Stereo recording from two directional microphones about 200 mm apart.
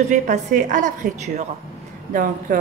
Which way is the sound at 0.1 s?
40° right (ahead or behind).